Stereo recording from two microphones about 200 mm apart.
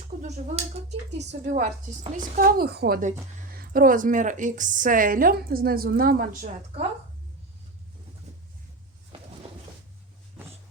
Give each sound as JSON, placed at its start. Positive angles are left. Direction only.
{"t": 0.2, "sound": "speech", "side_deg": -35}
{"t": 0.9, "sound": "a woman's voice", "side_deg": -60}
{"t": 2.1, "sound": "speech", "side_deg": -45}
{"t": 3.0, "sound": "speech", "side_deg": -45}